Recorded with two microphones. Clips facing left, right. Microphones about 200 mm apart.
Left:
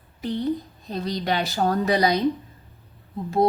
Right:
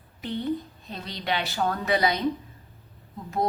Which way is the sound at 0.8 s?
40° left (ahead or behind).